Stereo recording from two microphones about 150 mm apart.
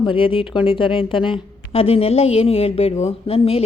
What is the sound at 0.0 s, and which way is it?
A woman's voice, 35° left (ahead or behind).